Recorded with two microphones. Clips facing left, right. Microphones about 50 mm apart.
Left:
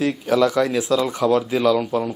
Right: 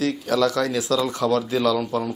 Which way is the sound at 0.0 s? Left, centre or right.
Centre.